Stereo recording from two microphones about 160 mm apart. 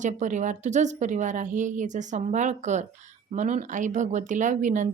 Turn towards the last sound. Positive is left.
turn(degrees=-50)  # may be behind; listen again after turning